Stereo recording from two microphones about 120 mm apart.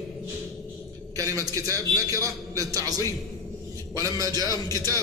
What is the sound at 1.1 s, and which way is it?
A man's voice, 30° right (ahead or behind).